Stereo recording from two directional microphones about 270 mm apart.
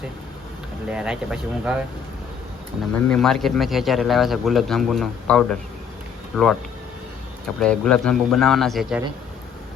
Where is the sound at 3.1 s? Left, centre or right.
Centre.